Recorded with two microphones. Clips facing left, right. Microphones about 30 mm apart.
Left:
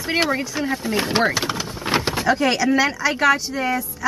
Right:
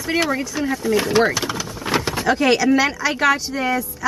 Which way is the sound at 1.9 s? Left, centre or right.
Centre.